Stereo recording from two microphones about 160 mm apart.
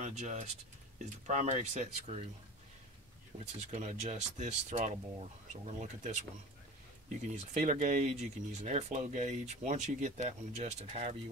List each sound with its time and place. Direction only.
0.0 s speech: 50° right (ahead or behind)
3.3 s speech: 45° right (ahead or behind)
7.5 s speech: 50° right (ahead or behind)